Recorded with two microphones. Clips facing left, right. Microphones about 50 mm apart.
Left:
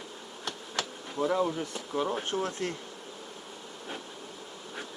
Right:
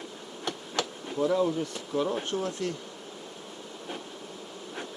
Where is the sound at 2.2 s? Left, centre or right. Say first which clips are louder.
Right 1 dB; left.